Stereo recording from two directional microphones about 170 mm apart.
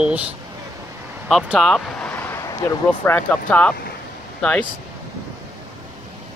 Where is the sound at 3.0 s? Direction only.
10° left (ahead or behind).